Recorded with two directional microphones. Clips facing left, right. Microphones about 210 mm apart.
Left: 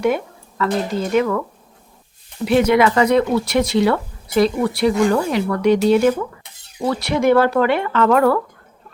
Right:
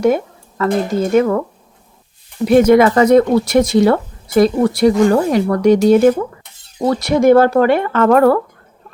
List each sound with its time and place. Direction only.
0.6 s speech: 45° right (ahead or behind)